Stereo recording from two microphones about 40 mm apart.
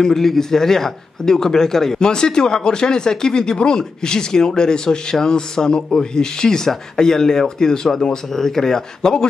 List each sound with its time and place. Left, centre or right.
0.0 s speech: centre